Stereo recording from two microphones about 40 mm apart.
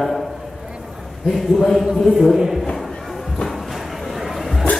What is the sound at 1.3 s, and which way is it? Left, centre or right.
Speech, centre.